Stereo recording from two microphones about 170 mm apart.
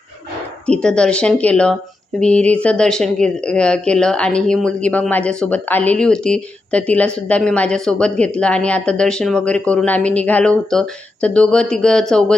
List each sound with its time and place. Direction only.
0.7 s speech: 5° left (ahead or behind)